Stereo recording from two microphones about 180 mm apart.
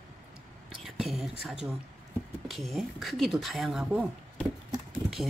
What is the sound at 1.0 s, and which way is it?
Speech, centre (ahead or behind).